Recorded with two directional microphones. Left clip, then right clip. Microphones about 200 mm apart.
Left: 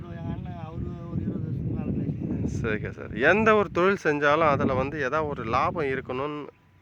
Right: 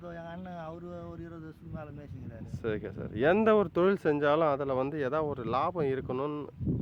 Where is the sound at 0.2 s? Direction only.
10° right (ahead or behind).